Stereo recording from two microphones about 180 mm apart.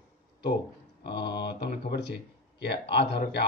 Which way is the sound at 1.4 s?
65° left (ahead or behind).